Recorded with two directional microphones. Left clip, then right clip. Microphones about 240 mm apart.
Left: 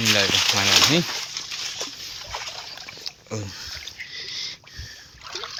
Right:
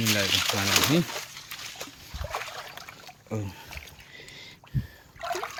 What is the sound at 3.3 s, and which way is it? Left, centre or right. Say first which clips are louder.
Speech: left 1 dB; centre.